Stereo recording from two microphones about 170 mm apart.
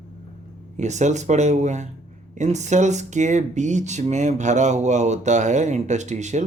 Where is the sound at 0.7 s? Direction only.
45° right (ahead or behind).